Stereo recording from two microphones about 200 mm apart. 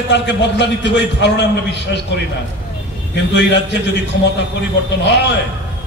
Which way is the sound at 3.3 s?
60° left (ahead or behind).